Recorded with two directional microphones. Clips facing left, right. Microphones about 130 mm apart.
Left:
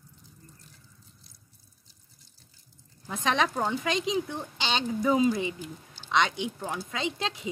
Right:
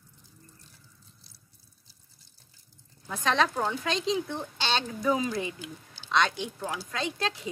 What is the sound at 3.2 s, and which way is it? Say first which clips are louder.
Speech: even; 15° left (ahead or behind).